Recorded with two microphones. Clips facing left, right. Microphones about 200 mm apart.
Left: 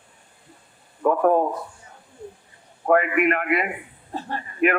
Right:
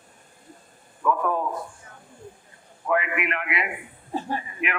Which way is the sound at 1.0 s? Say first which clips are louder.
Left 6 dB; 45° left (ahead or behind).